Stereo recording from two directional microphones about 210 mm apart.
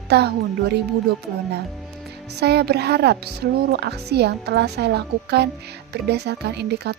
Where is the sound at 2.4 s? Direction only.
50° right (ahead or behind).